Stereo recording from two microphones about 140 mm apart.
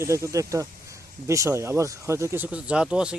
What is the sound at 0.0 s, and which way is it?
A man's voice, 20° right (ahead or behind).